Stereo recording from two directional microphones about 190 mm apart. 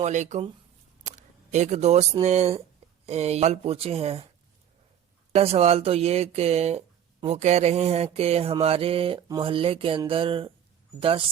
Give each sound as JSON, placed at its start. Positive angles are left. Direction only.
{"t": 0.0, "sound": "speech", "side_deg": -40}
{"t": 5.3, "sound": "speech", "side_deg": -30}
{"t": 7.2, "sound": "mantra", "side_deg": -35}